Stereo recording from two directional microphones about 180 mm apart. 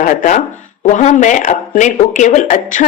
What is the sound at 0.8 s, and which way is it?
Speech, 40° left (ahead or behind).